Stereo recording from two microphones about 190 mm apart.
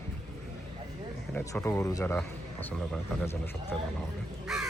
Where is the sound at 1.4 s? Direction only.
10° left (ahead or behind).